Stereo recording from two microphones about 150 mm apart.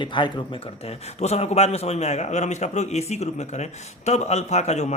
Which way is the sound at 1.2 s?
45° left (ahead or behind).